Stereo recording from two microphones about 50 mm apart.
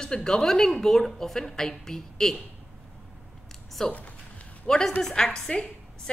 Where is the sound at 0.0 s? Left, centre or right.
Centre.